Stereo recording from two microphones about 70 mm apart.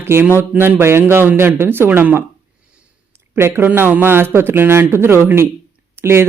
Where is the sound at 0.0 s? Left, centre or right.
Right.